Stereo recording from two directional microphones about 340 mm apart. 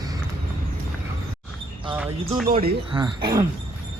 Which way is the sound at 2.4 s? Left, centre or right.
Right.